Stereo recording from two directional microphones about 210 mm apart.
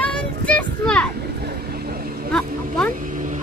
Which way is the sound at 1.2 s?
50° right (ahead or behind).